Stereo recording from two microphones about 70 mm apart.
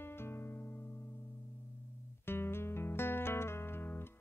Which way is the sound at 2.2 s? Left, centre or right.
Left.